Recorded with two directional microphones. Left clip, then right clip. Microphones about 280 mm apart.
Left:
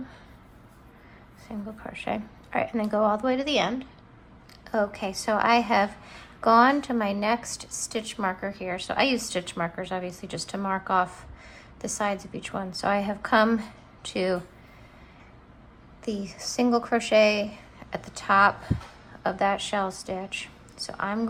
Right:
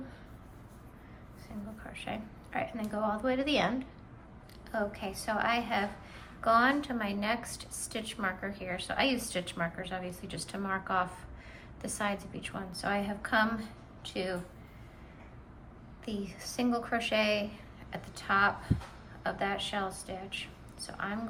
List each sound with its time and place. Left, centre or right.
1.5 s a woman's voice: centre
16.0 s a woman's voice: centre